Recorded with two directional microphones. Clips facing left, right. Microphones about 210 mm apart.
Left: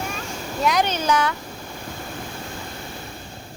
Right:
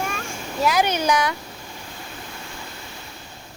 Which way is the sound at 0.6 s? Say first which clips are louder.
Right 1 dB; 5° right (ahead or behind).